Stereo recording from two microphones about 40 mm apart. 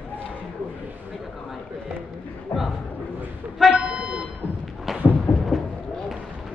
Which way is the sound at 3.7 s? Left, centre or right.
Right.